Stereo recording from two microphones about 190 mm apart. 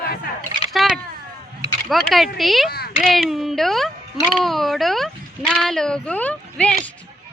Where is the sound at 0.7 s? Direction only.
Centre (ahead or behind).